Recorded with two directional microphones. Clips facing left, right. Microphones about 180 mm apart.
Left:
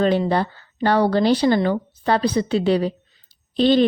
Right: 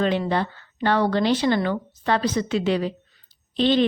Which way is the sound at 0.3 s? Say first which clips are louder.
Left 3 dB; 35° left (ahead or behind).